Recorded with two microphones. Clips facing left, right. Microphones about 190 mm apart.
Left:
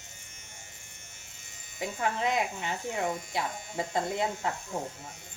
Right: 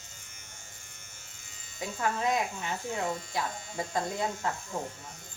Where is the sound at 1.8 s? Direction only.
20° left (ahead or behind).